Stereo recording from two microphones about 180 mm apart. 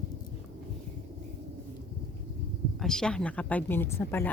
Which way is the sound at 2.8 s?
5° left (ahead or behind).